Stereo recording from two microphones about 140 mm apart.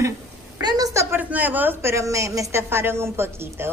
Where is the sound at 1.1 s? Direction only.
15° right (ahead or behind).